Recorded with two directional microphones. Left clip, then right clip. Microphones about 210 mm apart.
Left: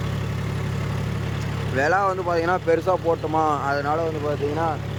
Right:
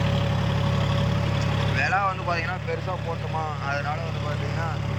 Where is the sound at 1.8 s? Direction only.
25° left (ahead or behind).